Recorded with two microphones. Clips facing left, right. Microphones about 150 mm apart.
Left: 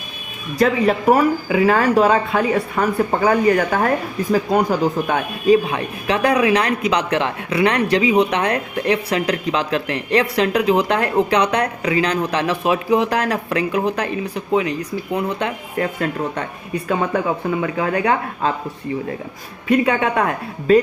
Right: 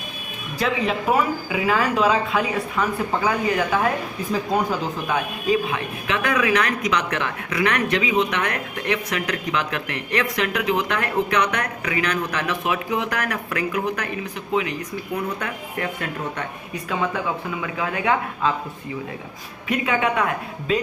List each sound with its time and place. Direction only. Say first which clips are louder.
0.6 s speech: left 7 dB; 45° left (ahead or behind)
19.6 s speech: left 5 dB; 35° left (ahead or behind)